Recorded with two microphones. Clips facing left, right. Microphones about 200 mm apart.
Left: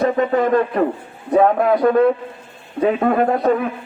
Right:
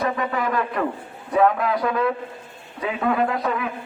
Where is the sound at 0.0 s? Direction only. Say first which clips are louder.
Left 8 dB; 45° left (ahead or behind).